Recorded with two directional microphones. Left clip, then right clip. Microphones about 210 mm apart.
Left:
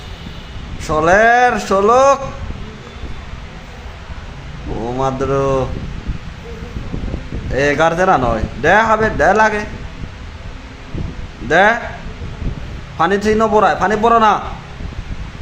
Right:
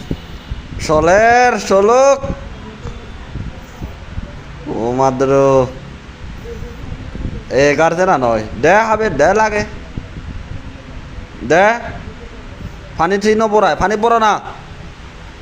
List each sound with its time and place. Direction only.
0.8 s a man's voice: 20° right (ahead or behind)
4.8 s speech: 20° right (ahead or behind)
7.5 s a man's voice: 20° right (ahead or behind)
11.4 s a man's voice: 20° right (ahead or behind)
13.0 s a man's voice: 15° right (ahead or behind)